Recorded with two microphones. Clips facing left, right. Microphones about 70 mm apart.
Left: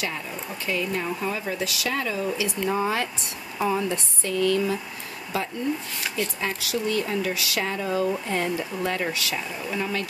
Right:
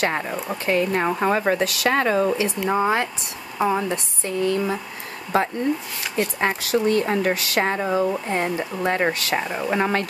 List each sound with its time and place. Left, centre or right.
0.0 s a woman's voice: right
5.3 s speech: right
7.9 s speech: right